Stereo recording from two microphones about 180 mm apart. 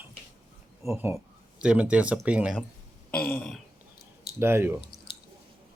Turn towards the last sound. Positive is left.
turn(degrees=-15)  # may be behind; listen again after turning